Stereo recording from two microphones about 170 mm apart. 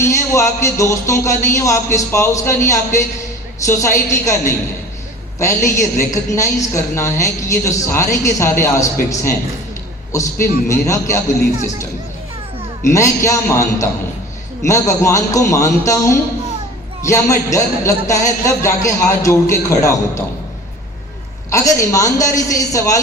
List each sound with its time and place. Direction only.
0.0 s a woman's voice: 15° left (ahead or behind)
10.4 s a woman's voice: 20° left (ahead or behind)
12.9 s a woman's voice: 20° left (ahead or behind)
21.5 s a man's voice: 20° left (ahead or behind)